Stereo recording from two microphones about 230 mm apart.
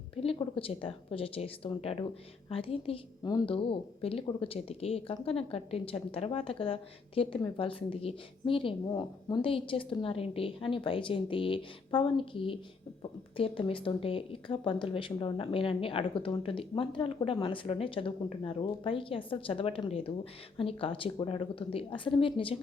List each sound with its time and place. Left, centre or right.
0.2 s a woman's voice: left